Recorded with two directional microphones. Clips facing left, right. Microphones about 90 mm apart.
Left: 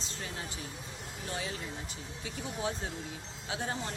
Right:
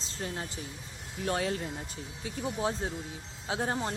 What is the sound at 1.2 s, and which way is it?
Speech, 60° right (ahead or behind).